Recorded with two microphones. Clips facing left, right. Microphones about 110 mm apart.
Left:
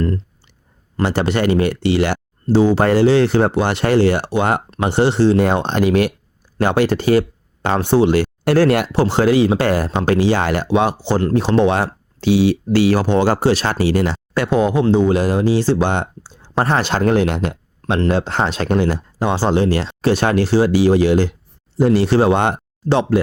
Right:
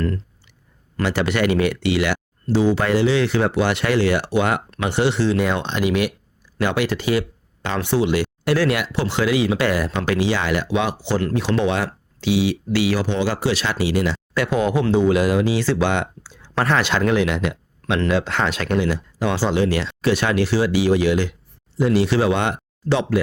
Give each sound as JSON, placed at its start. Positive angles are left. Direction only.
{"t": 0.9, "sound": "speech", "side_deg": 35}